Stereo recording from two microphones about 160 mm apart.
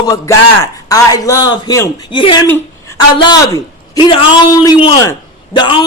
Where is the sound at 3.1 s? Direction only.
25° left (ahead or behind).